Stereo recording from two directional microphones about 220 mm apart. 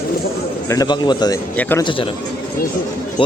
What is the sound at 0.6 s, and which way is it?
A man's voice, 15° left (ahead or behind).